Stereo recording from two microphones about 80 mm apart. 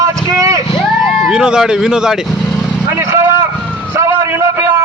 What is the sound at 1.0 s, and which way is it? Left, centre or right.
Vehicle, centre.